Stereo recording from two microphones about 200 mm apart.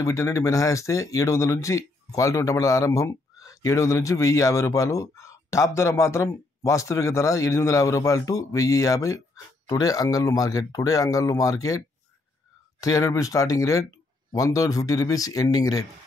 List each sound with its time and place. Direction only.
0.0 s speech: 15° left (ahead or behind)
12.8 s speech: 15° left (ahead or behind)